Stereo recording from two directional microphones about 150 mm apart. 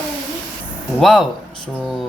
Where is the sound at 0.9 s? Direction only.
Centre (ahead or behind).